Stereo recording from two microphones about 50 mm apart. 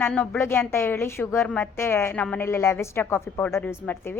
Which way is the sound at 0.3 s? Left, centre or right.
Left.